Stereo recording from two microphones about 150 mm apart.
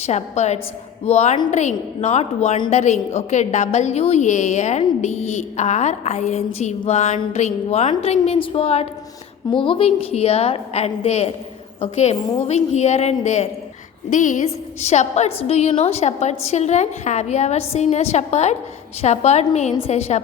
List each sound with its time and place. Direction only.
0.0 s a woman's voice: 50° left (ahead or behind)